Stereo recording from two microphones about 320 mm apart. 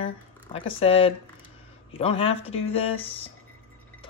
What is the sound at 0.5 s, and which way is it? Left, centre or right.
Speech, centre.